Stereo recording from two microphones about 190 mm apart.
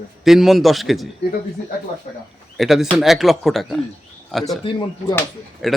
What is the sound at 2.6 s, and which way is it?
A man's voice, centre (ahead or behind).